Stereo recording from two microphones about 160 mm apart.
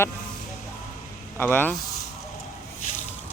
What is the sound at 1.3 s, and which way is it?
Speech, 15° left (ahead or behind).